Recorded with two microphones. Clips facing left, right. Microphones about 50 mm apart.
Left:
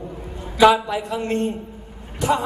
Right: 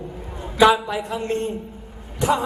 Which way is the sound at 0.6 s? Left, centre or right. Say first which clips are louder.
Left 1 dB; right.